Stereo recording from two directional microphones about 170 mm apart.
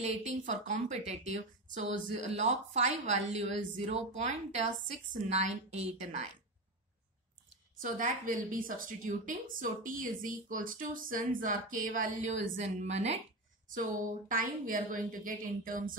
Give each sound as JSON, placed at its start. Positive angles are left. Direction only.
{"t": 0.0, "sound": "speech", "side_deg": -40}
{"t": 7.8, "sound": "a woman's voice", "side_deg": -55}